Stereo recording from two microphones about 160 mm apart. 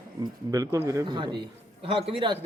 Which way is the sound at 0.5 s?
20° right (ahead or behind).